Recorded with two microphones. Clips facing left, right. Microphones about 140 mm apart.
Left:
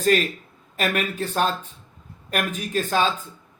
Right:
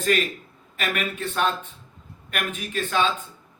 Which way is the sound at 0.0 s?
40° left (ahead or behind).